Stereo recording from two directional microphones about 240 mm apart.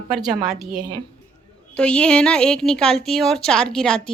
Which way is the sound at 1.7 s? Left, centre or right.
Centre.